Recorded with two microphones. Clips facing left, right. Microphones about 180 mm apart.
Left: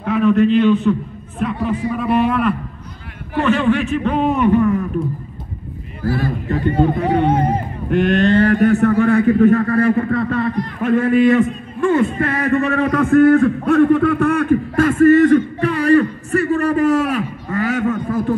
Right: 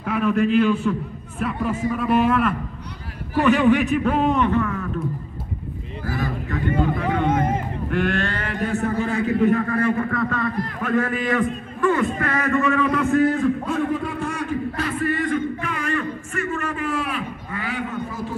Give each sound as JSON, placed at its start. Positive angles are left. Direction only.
{"t": 0.0, "sound": "a man's voice", "side_deg": -10}
{"t": 3.3, "sound": "a man's voice", "side_deg": -15}
{"t": 4.3, "sound": "a man's voice", "side_deg": 10}
{"t": 6.0, "sound": "a man's voice", "side_deg": -20}
{"t": 6.5, "sound": "speech", "side_deg": 30}
{"t": 7.9, "sound": "a man's voice", "side_deg": 20}
{"t": 8.6, "sound": "a man's voice", "side_deg": 65}
{"t": 9.8, "sound": "a man's voice", "side_deg": 35}
{"t": 13.0, "sound": "a man's voice", "side_deg": 60}